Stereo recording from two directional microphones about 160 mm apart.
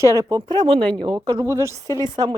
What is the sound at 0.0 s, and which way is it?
Speech, 20° right (ahead or behind).